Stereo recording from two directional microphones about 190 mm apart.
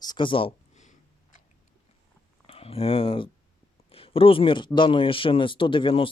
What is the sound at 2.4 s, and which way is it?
Speech, 30° left (ahead or behind).